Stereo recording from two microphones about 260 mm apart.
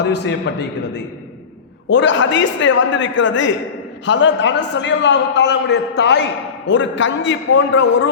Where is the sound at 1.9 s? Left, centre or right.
Left.